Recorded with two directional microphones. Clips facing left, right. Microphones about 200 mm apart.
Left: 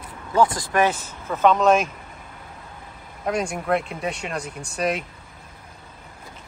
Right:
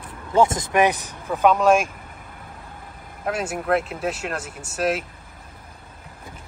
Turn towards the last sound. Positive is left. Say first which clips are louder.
# right 1 dB
turn(degrees=-5)  # may be behind; listen again after turning